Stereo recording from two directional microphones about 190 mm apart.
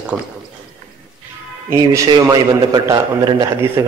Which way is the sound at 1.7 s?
15° right (ahead or behind).